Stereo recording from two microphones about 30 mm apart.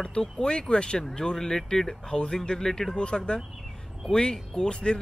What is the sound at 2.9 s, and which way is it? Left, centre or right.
Speech, left.